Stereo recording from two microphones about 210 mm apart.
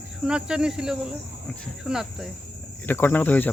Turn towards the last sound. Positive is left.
turn(degrees=10)  # may be behind; listen again after turning